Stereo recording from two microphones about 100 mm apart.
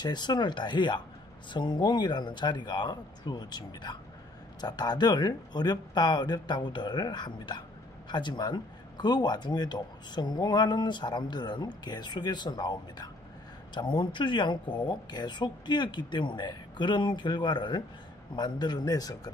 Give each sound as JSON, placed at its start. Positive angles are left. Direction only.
{"t": 0.0, "sound": "a man's voice", "side_deg": 45}